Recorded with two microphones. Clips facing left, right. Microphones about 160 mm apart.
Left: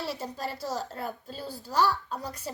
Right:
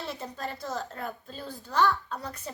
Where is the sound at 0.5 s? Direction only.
5° left (ahead or behind).